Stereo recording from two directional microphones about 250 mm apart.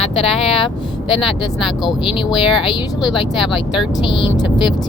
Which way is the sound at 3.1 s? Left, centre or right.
Centre.